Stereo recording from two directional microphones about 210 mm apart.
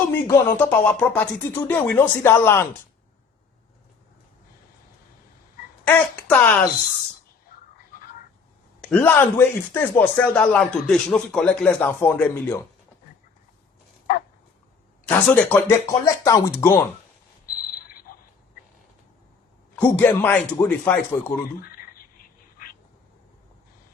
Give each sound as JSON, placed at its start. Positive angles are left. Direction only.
{"t": 0.1, "sound": "speech", "side_deg": 10}
{"t": 5.8, "sound": "speech", "side_deg": 5}
{"t": 8.8, "sound": "speech", "side_deg": 5}
{"t": 15.0, "sound": "speech", "side_deg": 10}
{"t": 17.7, "sound": "frog", "side_deg": 45}
{"t": 19.7, "sound": "speech", "side_deg": 10}